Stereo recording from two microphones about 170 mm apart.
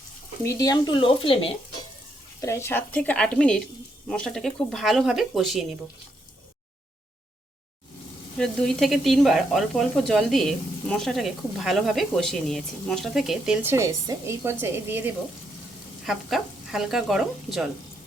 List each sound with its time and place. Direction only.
0.4 s speech: 20° left (ahead or behind)
2.4 s a woman's voice: 15° left (ahead or behind); by 5.6 s centre (ahead or behind)
8.4 s speech: 5° left (ahead or behind); by 15.1 s 10° right (ahead or behind)
16.0 s speech: centre (ahead or behind)